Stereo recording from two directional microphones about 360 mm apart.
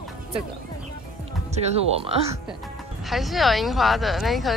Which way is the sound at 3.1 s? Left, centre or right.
Centre.